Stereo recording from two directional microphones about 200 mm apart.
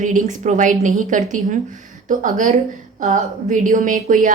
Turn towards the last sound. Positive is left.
turn(degrees=-40)  # may be behind; listen again after turning